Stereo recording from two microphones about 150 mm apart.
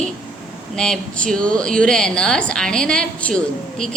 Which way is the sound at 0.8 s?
5° left (ahead or behind).